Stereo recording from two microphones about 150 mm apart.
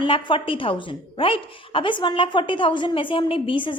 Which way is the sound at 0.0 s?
35° left (ahead or behind).